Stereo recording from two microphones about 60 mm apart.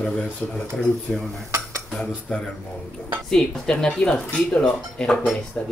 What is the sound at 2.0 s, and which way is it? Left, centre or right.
Speech, centre.